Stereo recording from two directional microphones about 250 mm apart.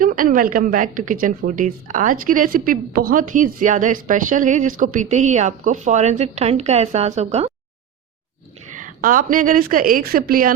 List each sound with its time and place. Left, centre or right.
0.0 s a woman's voice: right
8.7 s a woman's voice: right